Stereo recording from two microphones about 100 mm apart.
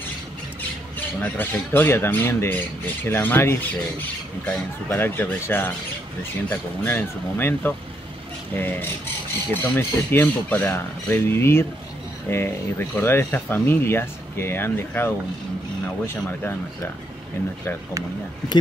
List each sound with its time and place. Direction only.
0.6 s speech: 15° left (ahead or behind)